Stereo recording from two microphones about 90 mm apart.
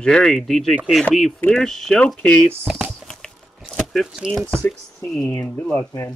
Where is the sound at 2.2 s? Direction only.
15° left (ahead or behind).